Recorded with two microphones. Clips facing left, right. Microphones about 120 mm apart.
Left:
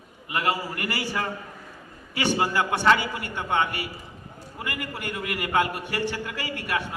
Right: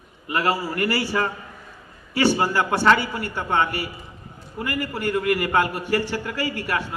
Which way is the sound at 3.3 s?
40° right (ahead or behind).